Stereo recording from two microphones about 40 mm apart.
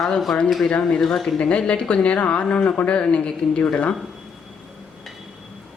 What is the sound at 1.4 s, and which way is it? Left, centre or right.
Speech, left.